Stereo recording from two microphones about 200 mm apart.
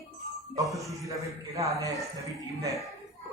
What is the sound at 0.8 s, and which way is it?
A man's voice, 15° right (ahead or behind).